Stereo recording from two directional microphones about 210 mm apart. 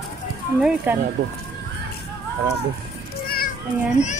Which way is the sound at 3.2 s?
45° left (ahead or behind).